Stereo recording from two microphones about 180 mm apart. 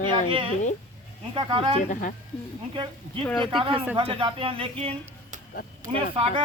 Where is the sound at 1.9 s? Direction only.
50° left (ahead or behind).